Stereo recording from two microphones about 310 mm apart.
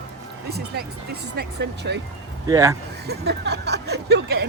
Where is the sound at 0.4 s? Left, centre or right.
Right.